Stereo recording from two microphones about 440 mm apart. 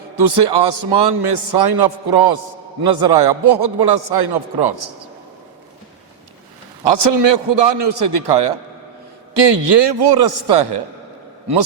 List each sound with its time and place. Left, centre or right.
0.2 s a man's voice: right
6.8 s a man's voice: right